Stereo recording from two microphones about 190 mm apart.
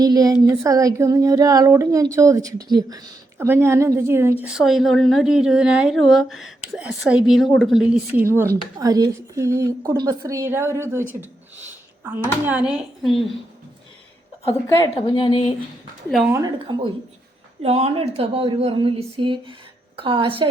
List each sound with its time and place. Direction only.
0.0 s a woman's voice: 20° right (ahead or behind)
12.5 s a woman's voice: 5° right (ahead or behind)
14.9 s a woman's voice: 25° left (ahead or behind)
16.0 s a woman's voice: centre (ahead or behind)
16.3 s a woman's voice: 20° right (ahead or behind)
17.6 s a woman's voice: 35° right (ahead or behind)